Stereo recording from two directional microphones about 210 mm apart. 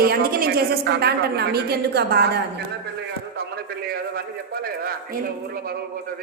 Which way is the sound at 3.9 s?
45° right (ahead or behind).